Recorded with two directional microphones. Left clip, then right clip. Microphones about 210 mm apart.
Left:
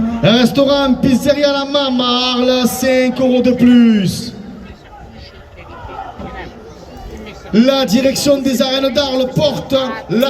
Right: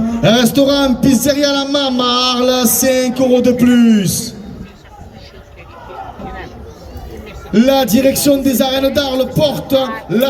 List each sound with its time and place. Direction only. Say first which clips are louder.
0.1 s a man's voice: right 1 dB; 40° right (ahead or behind)
7.5 s a man's voice: right 1 dB; 35° right (ahead or behind)